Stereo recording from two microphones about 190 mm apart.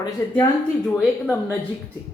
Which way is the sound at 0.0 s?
20° left (ahead or behind).